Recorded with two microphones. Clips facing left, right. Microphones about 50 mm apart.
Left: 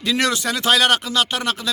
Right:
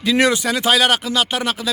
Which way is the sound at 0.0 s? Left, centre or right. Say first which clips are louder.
Right 4 dB; centre.